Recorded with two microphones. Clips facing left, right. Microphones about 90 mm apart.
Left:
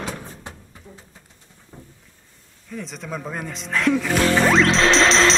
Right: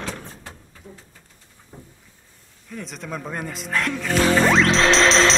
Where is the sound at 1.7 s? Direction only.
10° right (ahead or behind).